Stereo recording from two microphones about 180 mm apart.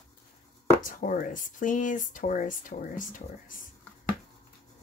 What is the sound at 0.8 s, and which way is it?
Speech, 45° left (ahead or behind).